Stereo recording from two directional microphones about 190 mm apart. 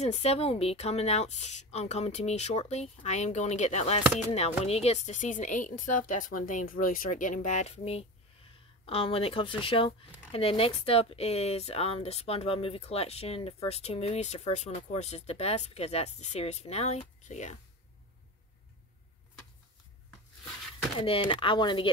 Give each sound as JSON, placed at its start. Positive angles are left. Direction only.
{"t": 0.0, "sound": "speech", "side_deg": 35}
{"t": 21.0, "sound": "speech", "side_deg": 25}